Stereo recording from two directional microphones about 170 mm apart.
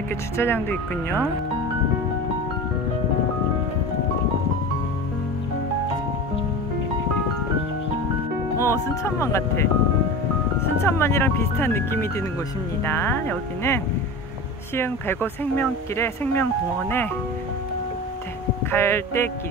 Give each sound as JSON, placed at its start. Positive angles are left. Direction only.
{"t": 0.4, "sound": "speech", "side_deg": 15}
{"t": 8.5, "sound": "speech", "side_deg": 15}
{"t": 10.9, "sound": "speech", "side_deg": 15}
{"t": 14.8, "sound": "speech", "side_deg": 15}
{"t": 18.7, "sound": "speech", "side_deg": 15}